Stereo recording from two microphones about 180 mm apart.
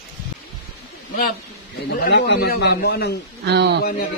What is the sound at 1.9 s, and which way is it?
A man's voice, 65° left (ahead or behind).